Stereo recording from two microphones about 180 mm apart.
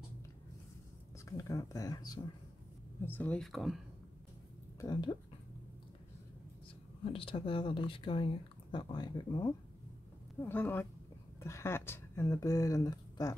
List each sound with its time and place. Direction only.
1.3 s speech: 20° left (ahead or behind)
3.1 s speech: 10° left (ahead or behind)
4.7 s speech: 25° left (ahead or behind)
7.1 s speech: 30° left (ahead or behind)
10.4 s speech: 10° left (ahead or behind)